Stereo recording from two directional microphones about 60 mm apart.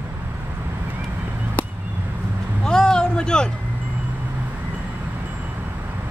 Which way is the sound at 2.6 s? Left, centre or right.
Centre.